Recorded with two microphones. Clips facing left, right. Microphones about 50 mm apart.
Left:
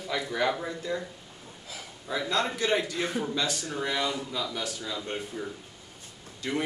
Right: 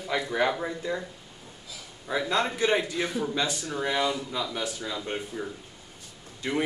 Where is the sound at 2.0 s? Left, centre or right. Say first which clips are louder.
Right 2 dB; right.